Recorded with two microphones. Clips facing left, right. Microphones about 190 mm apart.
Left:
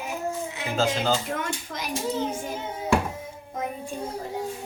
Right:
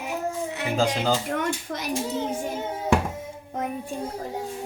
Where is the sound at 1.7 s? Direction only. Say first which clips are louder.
Right 3 dB; 50° right (ahead or behind).